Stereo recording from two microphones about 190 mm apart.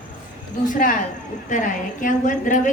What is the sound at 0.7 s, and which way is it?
A woman's voice, 45° left (ahead or behind).